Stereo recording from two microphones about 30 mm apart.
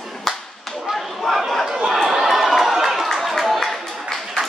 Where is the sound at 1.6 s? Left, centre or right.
Centre.